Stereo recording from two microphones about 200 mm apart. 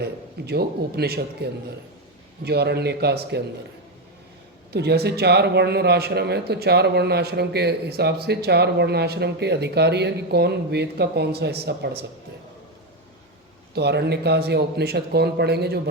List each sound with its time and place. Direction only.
0.0 s a man's voice: 55° right (ahead or behind)
4.7 s speech: 55° right (ahead or behind)
13.7 s speech: 55° right (ahead or behind)